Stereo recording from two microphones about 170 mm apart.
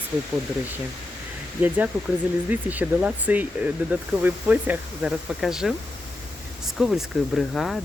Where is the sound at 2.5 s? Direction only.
10° right (ahead or behind).